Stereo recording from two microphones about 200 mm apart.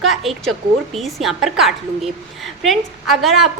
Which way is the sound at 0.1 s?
Centre (ahead or behind).